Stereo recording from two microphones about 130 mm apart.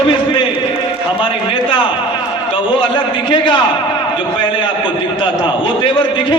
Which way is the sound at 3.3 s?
40° left (ahead or behind).